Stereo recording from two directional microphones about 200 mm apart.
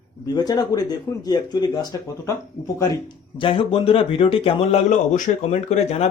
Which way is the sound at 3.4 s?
25° left (ahead or behind).